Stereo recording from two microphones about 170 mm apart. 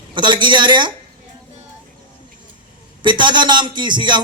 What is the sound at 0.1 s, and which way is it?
Speech, 25° right (ahead or behind).